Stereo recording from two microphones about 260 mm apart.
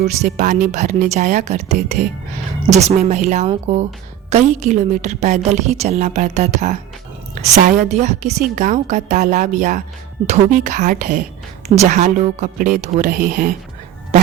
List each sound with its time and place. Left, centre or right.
0.0 s a woman's voice: right
7.9 s a woman's voice: right